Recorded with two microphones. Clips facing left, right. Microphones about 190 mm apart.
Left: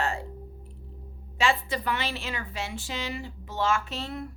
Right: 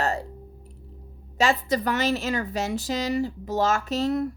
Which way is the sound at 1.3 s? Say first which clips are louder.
Right 4 dB; 40° right (ahead or behind).